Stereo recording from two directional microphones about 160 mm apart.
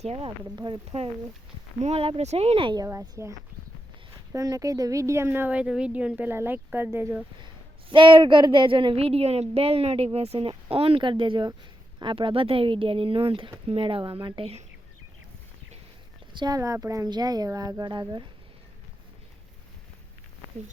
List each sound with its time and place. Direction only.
0.0 s speech: 35° right (ahead or behind)
0.9 s a woman's voice: 40° right (ahead or behind)
2.8 s a woman's voice: 20° right (ahead or behind)
7.4 s a woman's voice: 30° right (ahead or behind)
16.3 s speech: 30° right (ahead or behind)
16.6 s speech: 20° right (ahead or behind)